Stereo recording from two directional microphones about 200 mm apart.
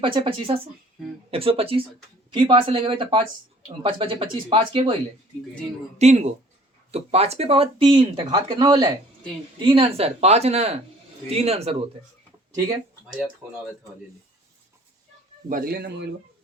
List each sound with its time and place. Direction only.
0.0 s speech: 25° right (ahead or behind)
6.0 s speech: 35° right (ahead or behind)
12.5 s speech: 15° right (ahead or behind)
15.4 s speech: 45° right (ahead or behind)